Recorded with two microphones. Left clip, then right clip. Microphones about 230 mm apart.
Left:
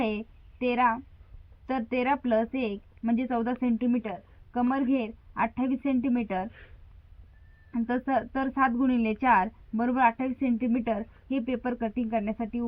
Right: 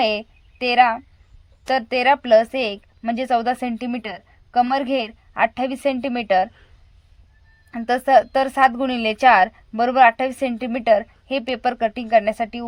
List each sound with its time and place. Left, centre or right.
0.0 s a woman's voice: right
7.7 s a woman's voice: right